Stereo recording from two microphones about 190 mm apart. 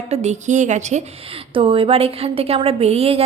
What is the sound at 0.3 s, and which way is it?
Speech, 40° right (ahead or behind).